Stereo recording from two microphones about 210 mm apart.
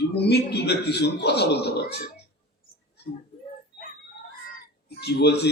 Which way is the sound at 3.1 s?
45° left (ahead or behind).